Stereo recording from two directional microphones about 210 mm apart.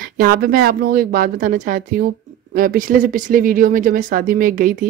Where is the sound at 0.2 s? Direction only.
45° right (ahead or behind).